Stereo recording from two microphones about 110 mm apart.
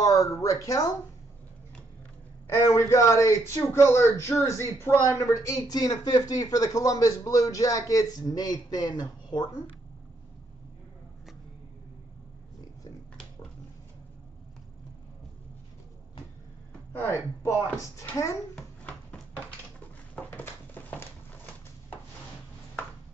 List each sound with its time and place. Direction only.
0.0 s a man's voice: 30° left (ahead or behind)
2.5 s a man's voice: 25° left (ahead or behind)
17.4 s a man's voice: 30° left (ahead or behind)
18.5 s babbling: 5° left (ahead or behind)
20.2 s a sound: 20° left (ahead or behind)